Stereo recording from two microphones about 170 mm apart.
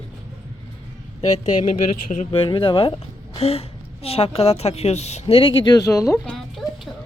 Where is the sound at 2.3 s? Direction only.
30° left (ahead or behind).